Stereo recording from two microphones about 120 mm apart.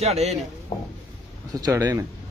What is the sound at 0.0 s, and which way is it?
Speech, 65° right (ahead or behind).